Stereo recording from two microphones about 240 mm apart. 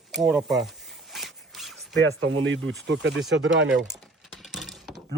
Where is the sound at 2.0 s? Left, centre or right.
Right.